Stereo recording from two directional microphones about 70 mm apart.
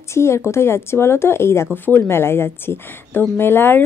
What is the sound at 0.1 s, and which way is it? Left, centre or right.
A woman's voice, left.